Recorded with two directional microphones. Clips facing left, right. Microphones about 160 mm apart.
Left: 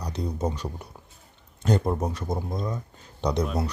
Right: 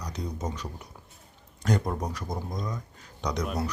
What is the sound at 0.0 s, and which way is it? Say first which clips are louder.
A man's voice: left 5 dB; 30° left (ahead or behind).